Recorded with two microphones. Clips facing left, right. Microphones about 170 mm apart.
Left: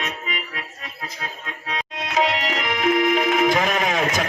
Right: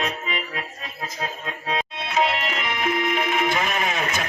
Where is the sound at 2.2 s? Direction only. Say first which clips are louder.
Left 1 dB; 90° left.